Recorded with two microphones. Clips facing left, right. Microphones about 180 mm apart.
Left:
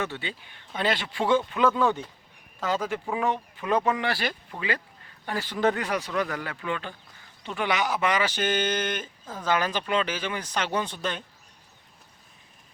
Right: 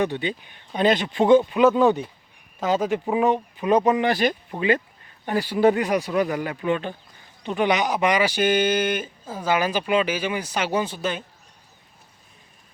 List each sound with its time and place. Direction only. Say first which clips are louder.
0.0 s speech: right 8 dB; 15° right (ahead or behind)